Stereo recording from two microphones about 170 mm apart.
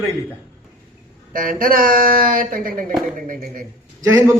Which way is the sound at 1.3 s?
55° right (ahead or behind).